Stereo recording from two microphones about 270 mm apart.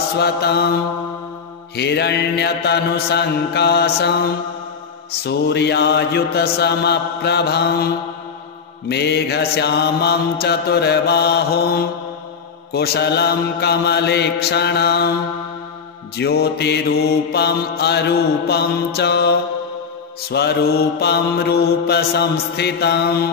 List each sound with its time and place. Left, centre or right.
0.2 s mantra: left
1.8 s mantra: left
5.2 s mantra: left
16.2 s mantra: left